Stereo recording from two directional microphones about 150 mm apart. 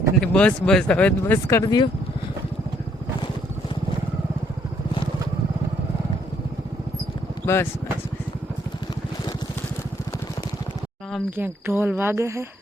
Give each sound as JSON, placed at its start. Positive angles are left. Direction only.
{"t": 0.2, "sound": "speech", "side_deg": 5}
{"t": 1.2, "sound": "speech", "side_deg": 20}
{"t": 7.4, "sound": "speech", "side_deg": 15}
{"t": 11.3, "sound": "speech", "side_deg": -15}